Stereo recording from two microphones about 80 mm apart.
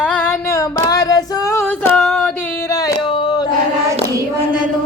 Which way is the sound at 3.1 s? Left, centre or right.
Left.